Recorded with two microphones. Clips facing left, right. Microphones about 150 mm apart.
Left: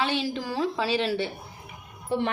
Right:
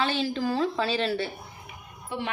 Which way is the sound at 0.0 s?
15° left (ahead or behind).